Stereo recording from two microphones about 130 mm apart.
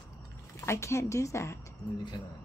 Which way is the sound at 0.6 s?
20° left (ahead or behind).